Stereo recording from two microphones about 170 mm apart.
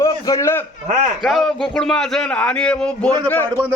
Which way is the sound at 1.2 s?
Centre (ahead or behind).